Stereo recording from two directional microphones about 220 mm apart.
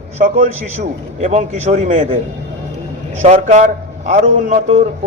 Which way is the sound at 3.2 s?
30° right (ahead or behind).